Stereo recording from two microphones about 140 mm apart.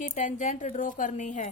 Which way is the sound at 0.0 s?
60° left (ahead or behind).